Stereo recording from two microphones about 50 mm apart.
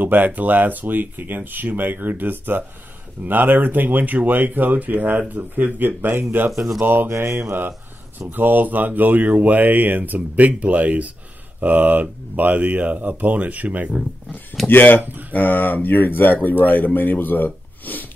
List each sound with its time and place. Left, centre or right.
0.0 s speech: right
7.1 s mantra: right
8.3 s speech: right
14.7 s speech: left